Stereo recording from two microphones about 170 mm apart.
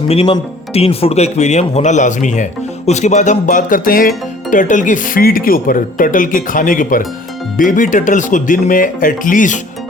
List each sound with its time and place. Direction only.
0.1 s a man's voice: 35° left (ahead or behind)